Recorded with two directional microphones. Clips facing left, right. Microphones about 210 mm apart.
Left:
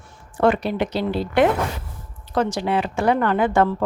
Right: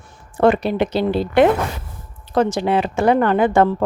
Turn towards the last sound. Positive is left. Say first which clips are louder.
# right 4 dB
turn(degrees=-20)  # may be behind; listen again after turning